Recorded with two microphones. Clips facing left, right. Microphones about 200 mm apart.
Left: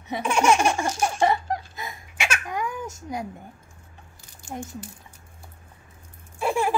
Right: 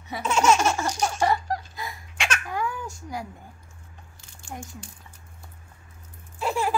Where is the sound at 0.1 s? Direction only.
15° left (ahead or behind).